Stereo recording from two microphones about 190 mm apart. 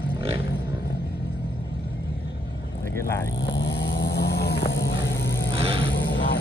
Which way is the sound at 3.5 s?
65° left (ahead or behind).